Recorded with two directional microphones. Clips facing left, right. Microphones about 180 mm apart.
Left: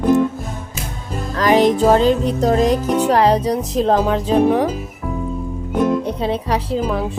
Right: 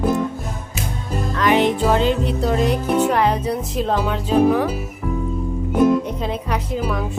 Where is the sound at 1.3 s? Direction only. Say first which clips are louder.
Left 3 dB; 35° left (ahead or behind).